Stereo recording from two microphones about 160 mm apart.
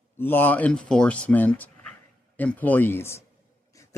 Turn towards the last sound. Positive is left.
turn(degrees=20)  # may be behind; listen again after turning